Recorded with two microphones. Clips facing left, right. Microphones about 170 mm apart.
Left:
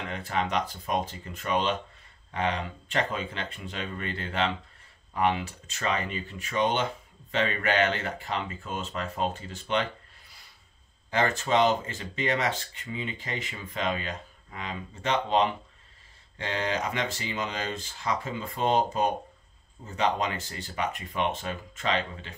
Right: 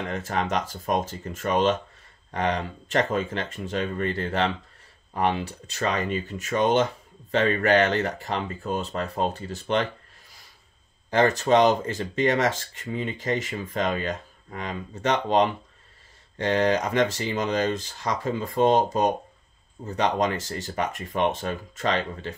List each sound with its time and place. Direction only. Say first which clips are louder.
0.1 s speech: right 1 dB; 45° right (ahead or behind)
11.1 s speech: right 6 dB; 40° right (ahead or behind)